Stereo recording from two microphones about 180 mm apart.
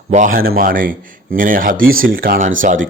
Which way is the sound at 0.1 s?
45° right (ahead or behind).